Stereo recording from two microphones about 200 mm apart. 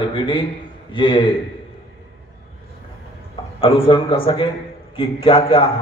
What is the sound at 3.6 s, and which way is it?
A man's voice, 25° left (ahead or behind).